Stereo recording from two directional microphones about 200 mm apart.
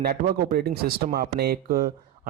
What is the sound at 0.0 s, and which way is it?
Speech, 50° right (ahead or behind).